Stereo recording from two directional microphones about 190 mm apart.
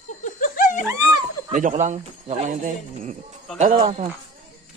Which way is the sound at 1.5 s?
40° right (ahead or behind).